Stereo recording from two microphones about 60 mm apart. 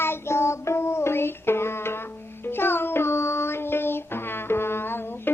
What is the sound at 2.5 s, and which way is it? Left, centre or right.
Child singing, left.